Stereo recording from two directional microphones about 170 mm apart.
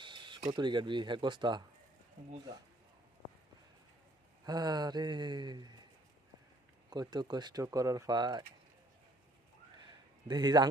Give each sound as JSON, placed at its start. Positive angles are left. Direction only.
{"t": 0.0, "sound": "speech", "side_deg": -30}
{"t": 4.4, "sound": "speech", "side_deg": -25}
{"t": 6.9, "sound": "speech", "side_deg": -25}
{"t": 10.2, "sound": "speech", "side_deg": -25}